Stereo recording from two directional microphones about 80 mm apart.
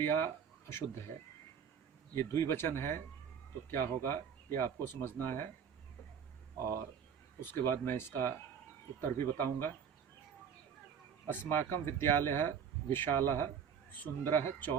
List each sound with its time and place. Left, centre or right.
0.0 s speech: left
2.1 s speech: left
7.4 s speech: left
11.3 s speech: left